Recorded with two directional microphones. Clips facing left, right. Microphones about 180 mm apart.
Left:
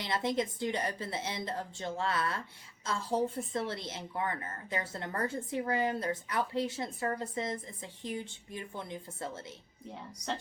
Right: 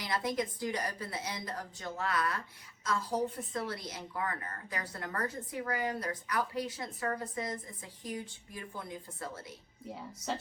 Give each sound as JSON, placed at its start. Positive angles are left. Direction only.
{"t": 0.0, "sound": "a woman's voice", "side_deg": 25}
{"t": 9.9, "sound": "a woman's voice", "side_deg": -5}